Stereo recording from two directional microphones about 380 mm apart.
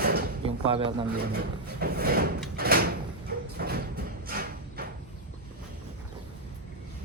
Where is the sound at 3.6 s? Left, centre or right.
Right.